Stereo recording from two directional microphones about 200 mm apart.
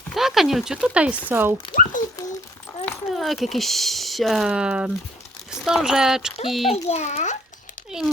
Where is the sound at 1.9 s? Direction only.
40° left (ahead or behind).